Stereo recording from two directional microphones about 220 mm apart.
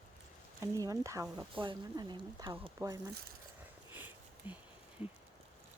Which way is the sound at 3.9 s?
10° right (ahead or behind).